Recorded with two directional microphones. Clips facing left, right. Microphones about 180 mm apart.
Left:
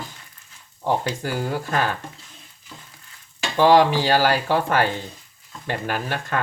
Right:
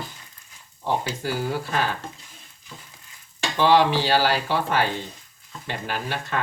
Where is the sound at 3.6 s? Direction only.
50° left (ahead or behind).